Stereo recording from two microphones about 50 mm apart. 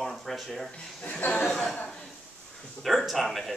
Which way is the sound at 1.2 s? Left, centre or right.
Left.